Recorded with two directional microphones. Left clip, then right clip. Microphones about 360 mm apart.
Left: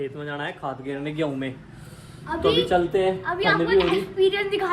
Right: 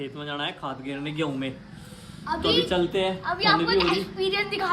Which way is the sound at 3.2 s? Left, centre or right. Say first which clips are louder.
Left 1 dB; centre.